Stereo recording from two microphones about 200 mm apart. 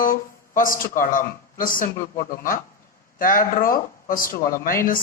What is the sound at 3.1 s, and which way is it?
Speech, 45° left (ahead or behind).